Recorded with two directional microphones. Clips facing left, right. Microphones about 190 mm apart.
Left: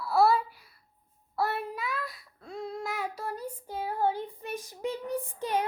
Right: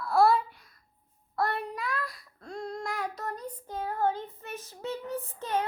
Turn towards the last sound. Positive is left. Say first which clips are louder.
# left 1 dB
turn(degrees=10)  # may be behind; listen again after turning